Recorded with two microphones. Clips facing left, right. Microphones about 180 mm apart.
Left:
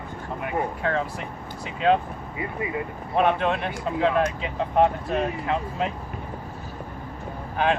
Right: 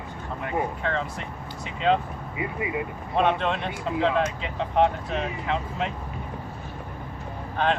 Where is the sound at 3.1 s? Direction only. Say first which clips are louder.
Left 2 dB; 5° left (ahead or behind).